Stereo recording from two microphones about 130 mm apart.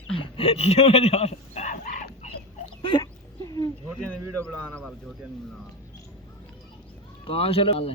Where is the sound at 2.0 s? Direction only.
60° left (ahead or behind).